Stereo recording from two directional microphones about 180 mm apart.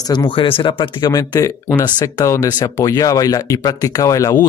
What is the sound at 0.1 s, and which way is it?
Speech, 25° left (ahead or behind).